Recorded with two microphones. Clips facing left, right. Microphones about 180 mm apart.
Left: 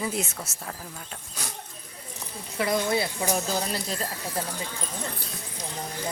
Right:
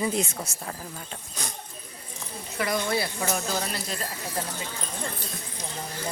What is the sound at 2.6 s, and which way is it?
Speech, 25° left (ahead or behind).